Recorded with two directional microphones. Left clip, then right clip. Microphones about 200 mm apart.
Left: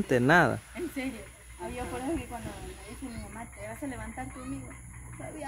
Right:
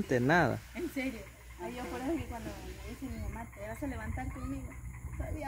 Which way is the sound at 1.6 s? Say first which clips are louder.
Left 3 dB; 5° right (ahead or behind).